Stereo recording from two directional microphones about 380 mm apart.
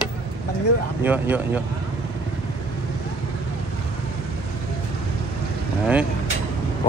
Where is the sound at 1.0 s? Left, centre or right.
Centre.